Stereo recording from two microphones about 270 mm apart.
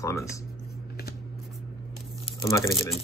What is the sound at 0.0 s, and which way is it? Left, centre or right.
Speech, centre.